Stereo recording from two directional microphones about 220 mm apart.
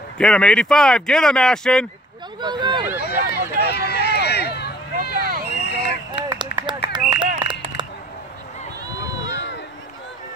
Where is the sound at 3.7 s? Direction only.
50° left (ahead or behind).